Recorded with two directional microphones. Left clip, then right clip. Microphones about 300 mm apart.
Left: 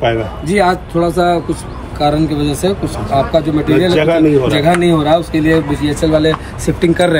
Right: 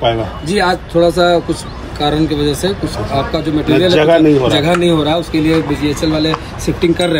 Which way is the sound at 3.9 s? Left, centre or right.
Right.